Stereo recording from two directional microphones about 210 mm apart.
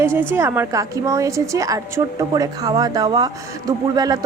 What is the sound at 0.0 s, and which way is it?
A woman's voice, 10° right (ahead or behind).